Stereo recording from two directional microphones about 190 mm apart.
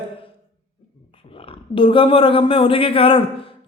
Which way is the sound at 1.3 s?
30° left (ahead or behind).